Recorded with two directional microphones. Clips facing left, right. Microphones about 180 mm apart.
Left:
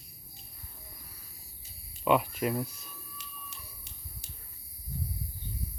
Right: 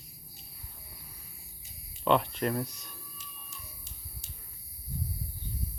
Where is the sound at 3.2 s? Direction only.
70° left (ahead or behind).